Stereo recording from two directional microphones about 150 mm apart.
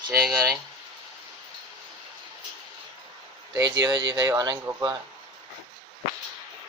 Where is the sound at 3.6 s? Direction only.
30° right (ahead or behind).